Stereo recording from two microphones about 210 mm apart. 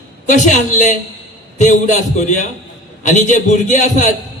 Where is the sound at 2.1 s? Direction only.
35° left (ahead or behind).